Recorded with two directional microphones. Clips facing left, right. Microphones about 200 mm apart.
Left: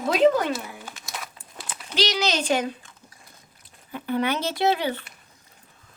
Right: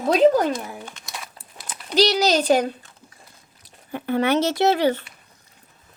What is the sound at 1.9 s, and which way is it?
Speech, 40° right (ahead or behind).